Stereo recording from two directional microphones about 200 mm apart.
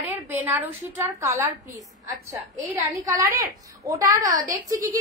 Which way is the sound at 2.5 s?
15° right (ahead or behind).